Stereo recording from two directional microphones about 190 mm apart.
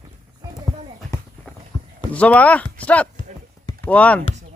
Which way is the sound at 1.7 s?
20° left (ahead or behind).